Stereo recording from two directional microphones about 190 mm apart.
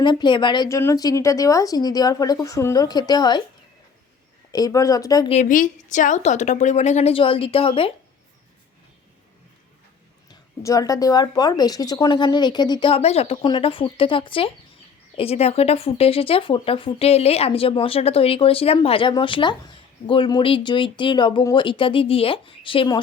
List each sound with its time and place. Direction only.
0.0 s speech: 25° left (ahead or behind)
4.5 s speech: 20° left (ahead or behind)
5.3 s a woman's voice: 40° left (ahead or behind)
10.6 s speech: 15° left (ahead or behind)